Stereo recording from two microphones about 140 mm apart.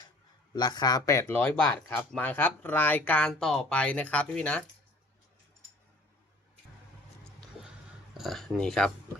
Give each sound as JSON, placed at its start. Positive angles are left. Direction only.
{"t": 0.5, "sound": "speech", "side_deg": 30}
{"t": 8.1, "sound": "speech", "side_deg": 0}